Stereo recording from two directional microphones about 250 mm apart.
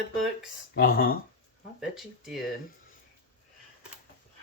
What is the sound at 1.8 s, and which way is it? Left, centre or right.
Speech, centre.